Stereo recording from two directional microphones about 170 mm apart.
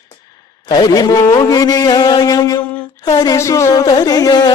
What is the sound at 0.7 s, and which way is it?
Speech, 25° left (ahead or behind).